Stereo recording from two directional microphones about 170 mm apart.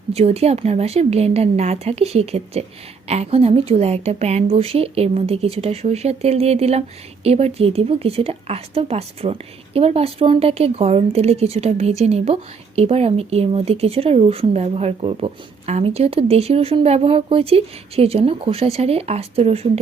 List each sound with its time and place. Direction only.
0.1 s a woman's voice: 40° right (ahead or behind)